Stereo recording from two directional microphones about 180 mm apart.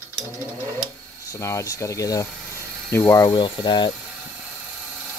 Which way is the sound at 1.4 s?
15° left (ahead or behind).